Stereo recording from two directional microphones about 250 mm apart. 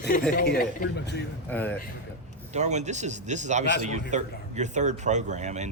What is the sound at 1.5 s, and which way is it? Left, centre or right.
Speech, centre.